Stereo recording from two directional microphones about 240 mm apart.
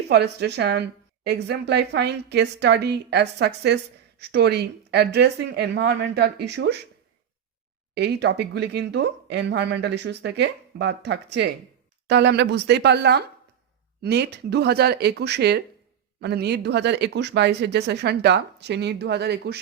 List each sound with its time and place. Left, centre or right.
0.1 s a woman's voice: right
7.9 s a woman's voice: right